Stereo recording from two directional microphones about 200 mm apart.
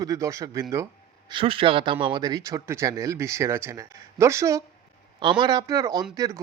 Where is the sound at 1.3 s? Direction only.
25° right (ahead or behind).